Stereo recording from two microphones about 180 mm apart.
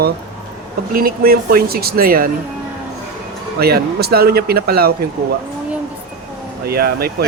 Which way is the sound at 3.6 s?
60° right (ahead or behind).